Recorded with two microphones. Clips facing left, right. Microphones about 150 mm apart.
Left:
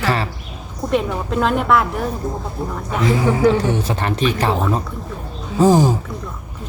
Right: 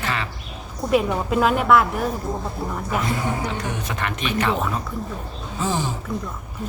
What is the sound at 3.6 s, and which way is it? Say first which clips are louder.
Speech: left 7 dB; 30° left (ahead or behind).